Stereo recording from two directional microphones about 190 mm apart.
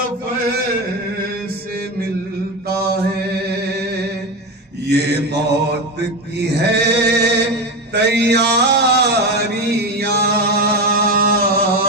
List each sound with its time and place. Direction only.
2.6 s mantra: 55° right (ahead or behind)
4.9 s mantra: 60° right (ahead or behind)
6.3 s male singing: 60° right (ahead or behind)
7.9 s a sound: 60° right (ahead or behind)